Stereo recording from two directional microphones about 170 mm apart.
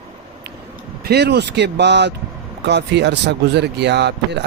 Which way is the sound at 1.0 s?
75° right (ahead or behind).